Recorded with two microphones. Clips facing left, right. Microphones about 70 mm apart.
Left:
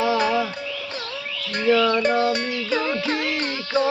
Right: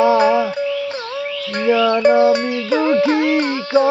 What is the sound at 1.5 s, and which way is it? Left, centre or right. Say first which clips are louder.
Music: right 3 dB; centre.